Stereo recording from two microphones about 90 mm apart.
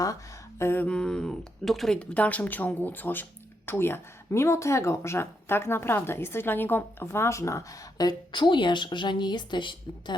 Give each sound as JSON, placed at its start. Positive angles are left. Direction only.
{"t": 0.6, "sound": "speech", "side_deg": 25}
{"t": 0.9, "sound": "speech", "side_deg": 10}
{"t": 2.0, "sound": "speech", "side_deg": 15}
{"t": 8.3, "sound": "a woman's voice", "side_deg": 60}